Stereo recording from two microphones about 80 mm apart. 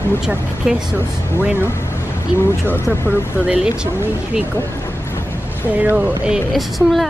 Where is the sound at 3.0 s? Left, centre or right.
Centre.